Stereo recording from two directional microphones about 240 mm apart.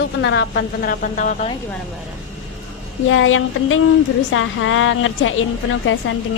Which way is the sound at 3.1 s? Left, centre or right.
Left.